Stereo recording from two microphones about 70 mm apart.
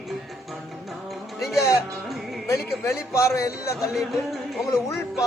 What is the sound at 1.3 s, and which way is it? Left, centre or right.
Music, centre.